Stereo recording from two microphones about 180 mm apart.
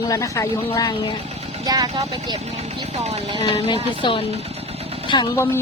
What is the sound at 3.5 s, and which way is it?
Speech, 30° left (ahead or behind).